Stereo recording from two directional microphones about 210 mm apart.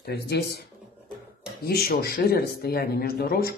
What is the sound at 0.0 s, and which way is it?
Speech, 50° left (ahead or behind).